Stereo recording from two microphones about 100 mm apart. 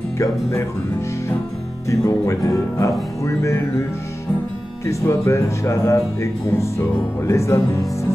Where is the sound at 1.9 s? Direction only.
30° left (ahead or behind).